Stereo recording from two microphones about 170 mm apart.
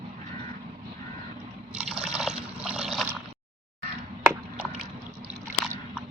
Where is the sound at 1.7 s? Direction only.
5° right (ahead or behind).